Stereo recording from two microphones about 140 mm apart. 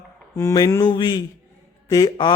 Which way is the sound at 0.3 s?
25° left (ahead or behind).